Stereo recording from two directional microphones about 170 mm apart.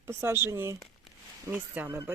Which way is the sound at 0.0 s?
15° right (ahead or behind).